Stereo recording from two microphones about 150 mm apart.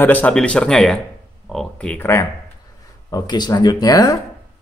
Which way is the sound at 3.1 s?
25° left (ahead or behind).